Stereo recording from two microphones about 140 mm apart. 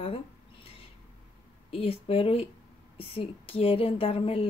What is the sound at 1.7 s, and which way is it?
Speech, 40° left (ahead or behind).